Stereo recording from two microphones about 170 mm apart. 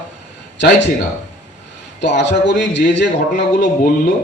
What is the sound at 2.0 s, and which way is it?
A man's voice, 90° left.